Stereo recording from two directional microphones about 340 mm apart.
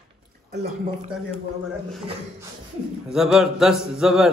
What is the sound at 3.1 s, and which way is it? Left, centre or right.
A man's voice, centre.